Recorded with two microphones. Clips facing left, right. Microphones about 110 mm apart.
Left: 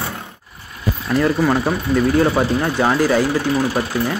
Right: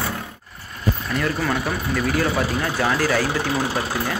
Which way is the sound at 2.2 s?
20° left (ahead or behind).